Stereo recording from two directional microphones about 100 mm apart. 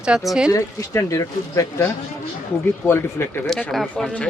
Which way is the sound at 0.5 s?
30° left (ahead or behind).